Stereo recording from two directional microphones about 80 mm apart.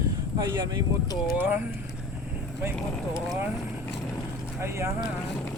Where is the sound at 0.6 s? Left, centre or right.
Right.